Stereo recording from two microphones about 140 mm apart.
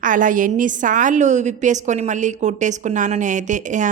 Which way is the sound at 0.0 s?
70° right (ahead or behind).